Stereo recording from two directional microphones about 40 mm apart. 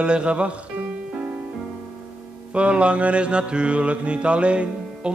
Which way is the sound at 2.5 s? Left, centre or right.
Right.